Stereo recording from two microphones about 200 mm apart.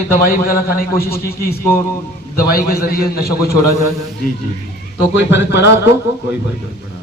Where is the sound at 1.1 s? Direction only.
50° left (ahead or behind).